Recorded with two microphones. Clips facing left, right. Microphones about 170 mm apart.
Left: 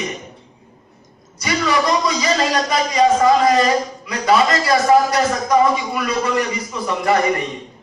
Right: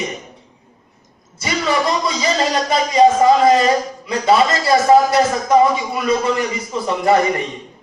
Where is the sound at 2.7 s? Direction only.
25° right (ahead or behind).